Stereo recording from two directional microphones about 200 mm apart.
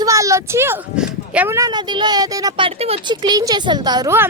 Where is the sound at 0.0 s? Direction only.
15° right (ahead or behind).